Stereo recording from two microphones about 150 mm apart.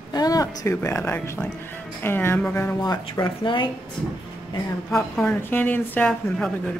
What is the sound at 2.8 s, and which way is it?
Speech, 25° left (ahead or behind).